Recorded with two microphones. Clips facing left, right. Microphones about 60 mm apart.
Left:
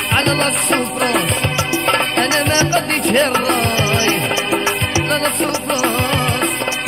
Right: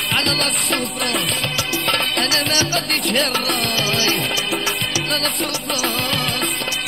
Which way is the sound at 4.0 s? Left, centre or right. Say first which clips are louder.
Left 4 dB; left.